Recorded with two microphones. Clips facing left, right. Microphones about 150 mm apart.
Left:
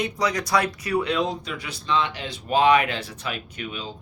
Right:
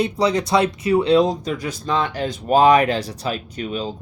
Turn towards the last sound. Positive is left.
turn(degrees=-40)  # may be behind; listen again after turning